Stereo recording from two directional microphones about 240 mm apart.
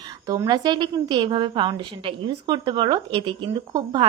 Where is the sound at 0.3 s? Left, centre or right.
Centre.